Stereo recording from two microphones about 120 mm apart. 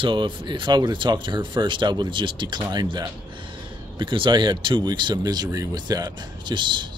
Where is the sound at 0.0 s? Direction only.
45° right (ahead or behind).